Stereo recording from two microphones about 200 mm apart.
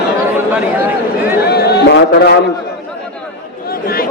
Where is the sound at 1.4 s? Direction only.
55° left (ahead or behind).